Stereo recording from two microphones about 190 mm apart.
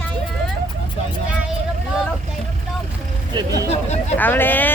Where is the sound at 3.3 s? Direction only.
20° right (ahead or behind).